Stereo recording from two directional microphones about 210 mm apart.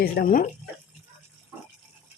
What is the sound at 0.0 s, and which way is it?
Speech, 45° left (ahead or behind).